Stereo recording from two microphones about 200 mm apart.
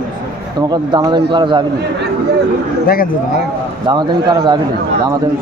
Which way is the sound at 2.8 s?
45° left (ahead or behind).